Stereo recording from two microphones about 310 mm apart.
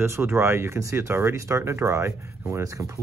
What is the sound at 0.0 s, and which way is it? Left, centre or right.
Speech, centre.